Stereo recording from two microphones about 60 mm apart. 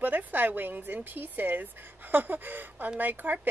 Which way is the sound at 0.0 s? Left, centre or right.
Right.